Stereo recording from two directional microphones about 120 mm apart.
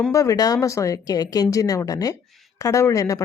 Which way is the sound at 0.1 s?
25° left (ahead or behind).